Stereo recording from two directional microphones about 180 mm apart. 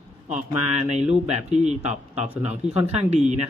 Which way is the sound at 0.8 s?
35° right (ahead or behind).